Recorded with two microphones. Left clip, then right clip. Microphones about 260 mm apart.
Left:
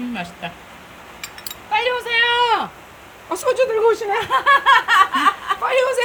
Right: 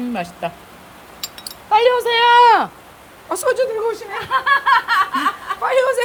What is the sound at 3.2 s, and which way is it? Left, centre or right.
Speech, centre.